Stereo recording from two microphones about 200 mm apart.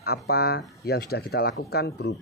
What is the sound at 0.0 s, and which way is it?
Speech, 50° left (ahead or behind).